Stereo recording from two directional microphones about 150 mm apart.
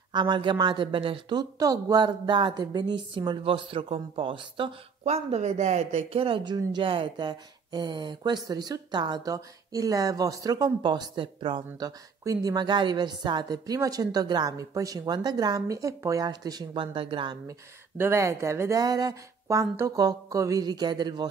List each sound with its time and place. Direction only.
0.1 s a woman's voice: 30° right (ahead or behind)
17.5 s a woman's voice: 15° right (ahead or behind)